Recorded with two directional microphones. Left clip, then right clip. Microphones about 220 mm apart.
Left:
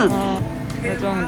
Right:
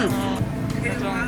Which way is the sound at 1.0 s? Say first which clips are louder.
Left 4 dB; 50° left (ahead or behind).